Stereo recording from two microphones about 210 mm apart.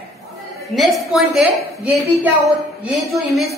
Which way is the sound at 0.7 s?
Centre (ahead or behind).